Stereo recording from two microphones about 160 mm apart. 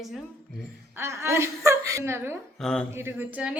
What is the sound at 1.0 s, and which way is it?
A woman's voice, 15° right (ahead or behind).